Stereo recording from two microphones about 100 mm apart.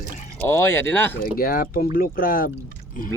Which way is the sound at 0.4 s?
25° left (ahead or behind).